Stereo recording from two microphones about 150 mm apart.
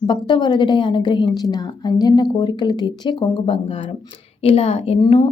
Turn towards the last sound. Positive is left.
turn(degrees=30)  # may be behind; listen again after turning